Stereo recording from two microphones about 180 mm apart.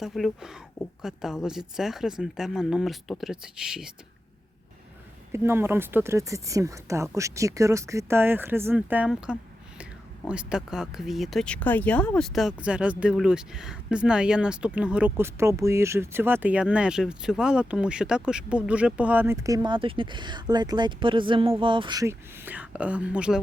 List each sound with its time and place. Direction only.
0.0 s speech: centre (ahead or behind)
5.3 s speech: 15° right (ahead or behind)